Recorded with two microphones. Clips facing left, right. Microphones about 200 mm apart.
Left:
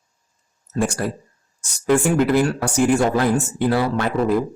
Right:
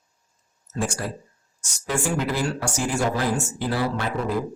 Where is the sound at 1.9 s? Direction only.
60° left (ahead or behind).